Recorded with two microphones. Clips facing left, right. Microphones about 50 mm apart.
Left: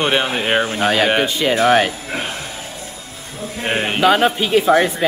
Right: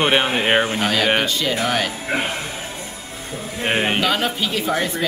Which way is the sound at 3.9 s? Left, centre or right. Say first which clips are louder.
Left 6 dB; left.